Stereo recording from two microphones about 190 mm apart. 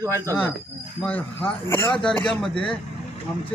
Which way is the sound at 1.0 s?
5° left (ahead or behind).